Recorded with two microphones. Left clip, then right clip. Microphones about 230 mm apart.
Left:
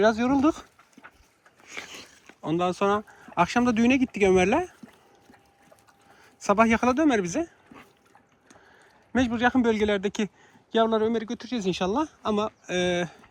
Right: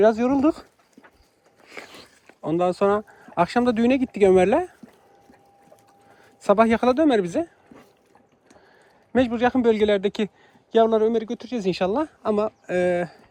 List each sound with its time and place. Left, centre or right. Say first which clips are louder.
0.0 s a man's voice: right 3 dB; centre
2.2 s speech: right 4 dB; centre
3.7 s speech: right 2 dB; left
4.4 s speech: right 4 dB; centre
6.5 s speech: right 3 dB; centre
9.1 s a man's voice: right 3 dB; centre